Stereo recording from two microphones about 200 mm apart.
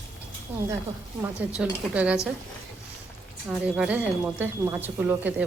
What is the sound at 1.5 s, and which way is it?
Speech, 5° right (ahead or behind).